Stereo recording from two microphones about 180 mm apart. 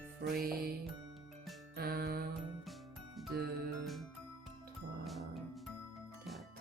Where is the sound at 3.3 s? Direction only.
60° right (ahead or behind).